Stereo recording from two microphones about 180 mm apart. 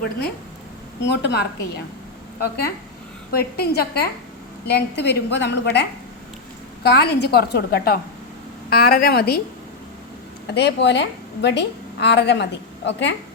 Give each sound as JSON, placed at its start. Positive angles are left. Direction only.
{"t": 1.1, "sound": "a woman's voice", "side_deg": 70}
{"t": 6.8, "sound": "a woman's voice", "side_deg": 65}
{"t": 10.4, "sound": "a woman's voice", "side_deg": 70}